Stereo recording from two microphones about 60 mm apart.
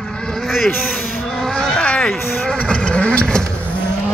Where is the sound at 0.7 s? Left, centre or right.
Left.